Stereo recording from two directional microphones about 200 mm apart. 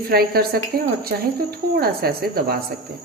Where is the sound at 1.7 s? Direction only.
50° right (ahead or behind).